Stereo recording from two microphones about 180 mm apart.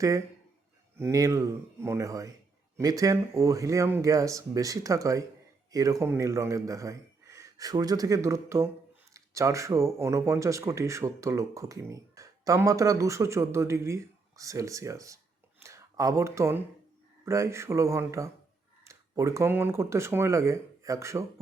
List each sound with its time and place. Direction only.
0.9 s speech: 15° right (ahead or behind)